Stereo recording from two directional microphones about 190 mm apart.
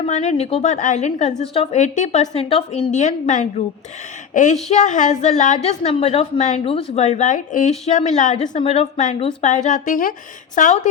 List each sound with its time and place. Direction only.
0.0 s a woman's voice: 35° left (ahead or behind)